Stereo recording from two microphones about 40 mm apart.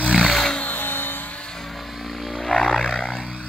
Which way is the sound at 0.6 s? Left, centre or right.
Left.